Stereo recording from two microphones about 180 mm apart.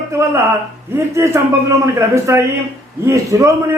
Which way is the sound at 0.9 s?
15° right (ahead or behind).